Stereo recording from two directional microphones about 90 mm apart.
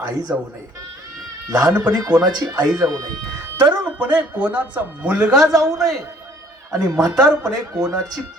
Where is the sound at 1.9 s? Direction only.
45° right (ahead or behind).